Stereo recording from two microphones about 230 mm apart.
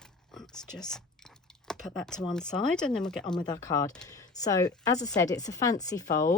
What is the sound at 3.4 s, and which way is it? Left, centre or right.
A woman's voice, centre.